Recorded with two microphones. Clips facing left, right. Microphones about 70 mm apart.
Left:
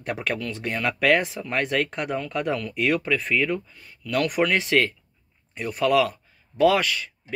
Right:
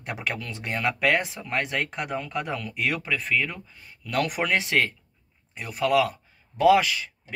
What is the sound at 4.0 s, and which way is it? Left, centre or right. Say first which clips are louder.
Speech: left 3 dB; right.